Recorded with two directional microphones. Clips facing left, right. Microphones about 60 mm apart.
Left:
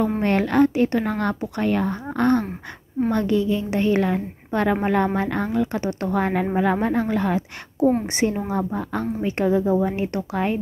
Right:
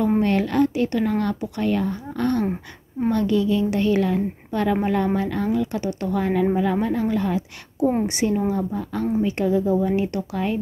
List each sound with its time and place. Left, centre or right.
0.2 s a woman's voice: left
8.1 s a woman's voice: left